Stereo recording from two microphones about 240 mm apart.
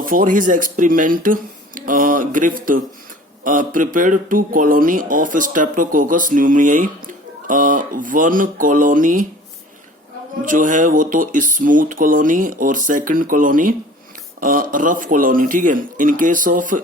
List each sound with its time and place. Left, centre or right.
0.0 s speech: right
10.4 s speech: right